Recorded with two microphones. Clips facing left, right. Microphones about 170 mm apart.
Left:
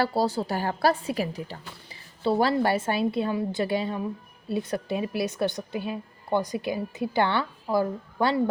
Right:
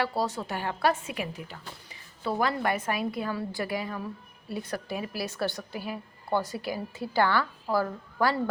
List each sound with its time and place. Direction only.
0.0 s a woman's voice: 35° left (ahead or behind)